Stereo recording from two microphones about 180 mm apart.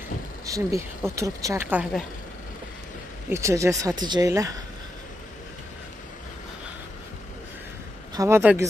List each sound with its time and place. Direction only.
0.5 s speech: 15° right (ahead or behind)
3.3 s speech: 15° right (ahead or behind)
8.1 s speech: 15° right (ahead or behind)